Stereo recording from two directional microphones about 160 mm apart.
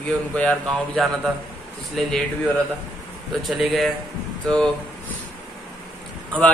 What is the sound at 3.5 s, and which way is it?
Speech, centre (ahead or behind).